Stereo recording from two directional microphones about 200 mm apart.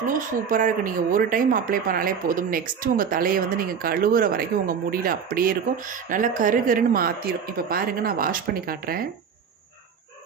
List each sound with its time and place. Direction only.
0.1 s speech: 45° right (ahead or behind)